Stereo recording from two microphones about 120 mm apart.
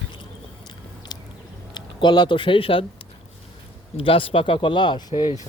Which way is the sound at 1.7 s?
40° left (ahead or behind).